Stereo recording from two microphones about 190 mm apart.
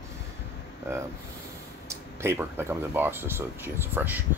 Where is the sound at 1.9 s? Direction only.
15° right (ahead or behind).